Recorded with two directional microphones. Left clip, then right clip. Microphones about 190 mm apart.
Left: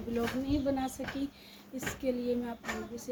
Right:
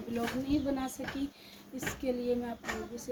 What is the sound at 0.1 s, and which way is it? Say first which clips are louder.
A woman's voice: even; 5° left (ahead or behind).